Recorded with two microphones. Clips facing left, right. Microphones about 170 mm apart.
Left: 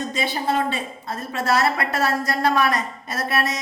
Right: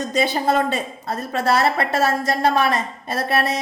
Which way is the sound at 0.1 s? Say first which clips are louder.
Right 7 dB; 40° right (ahead or behind).